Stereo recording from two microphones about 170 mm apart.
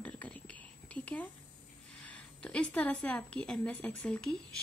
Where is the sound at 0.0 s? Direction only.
10° left (ahead or behind).